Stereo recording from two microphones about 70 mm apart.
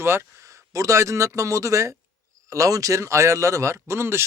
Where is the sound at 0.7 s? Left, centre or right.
Right.